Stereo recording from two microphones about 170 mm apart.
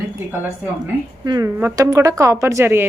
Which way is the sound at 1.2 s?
20° right (ahead or behind).